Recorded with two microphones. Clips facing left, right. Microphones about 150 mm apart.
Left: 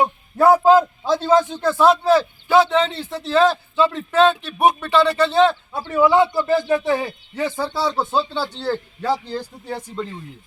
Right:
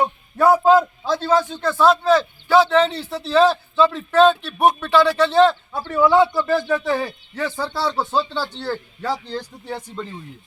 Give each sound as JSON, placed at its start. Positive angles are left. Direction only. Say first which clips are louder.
{"t": 0.0, "sound": "a man's voice", "louder": "left 1 dB", "side_deg": 10}
{"t": 1.2, "sound": "a man's voice", "louder": "left 2 dB", "side_deg": 20}